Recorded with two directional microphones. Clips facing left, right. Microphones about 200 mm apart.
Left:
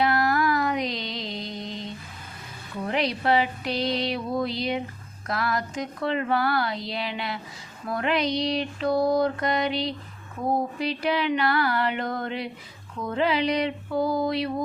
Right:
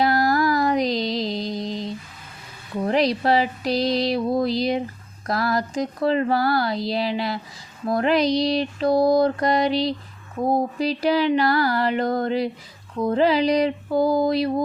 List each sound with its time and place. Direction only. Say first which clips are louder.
0.0 s music: right 3 dB; 35° right (ahead or behind)
2.8 s speech: right 5 dB; 35° right (ahead or behind)